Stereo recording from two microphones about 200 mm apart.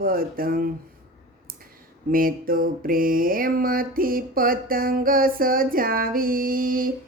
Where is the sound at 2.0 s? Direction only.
45° right (ahead or behind).